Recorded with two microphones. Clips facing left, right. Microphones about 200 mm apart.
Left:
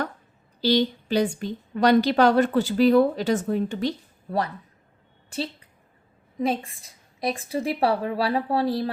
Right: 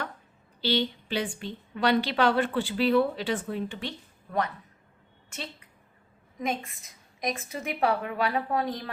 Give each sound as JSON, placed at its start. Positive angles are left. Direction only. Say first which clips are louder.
{"t": 0.6, "sound": "speech", "louder": "left 6 dB", "side_deg": 40}
{"t": 5.3, "sound": "a sound", "louder": "left 10 dB", "side_deg": 35}
{"t": 6.4, "sound": "speech", "louder": "left 6 dB", "side_deg": 30}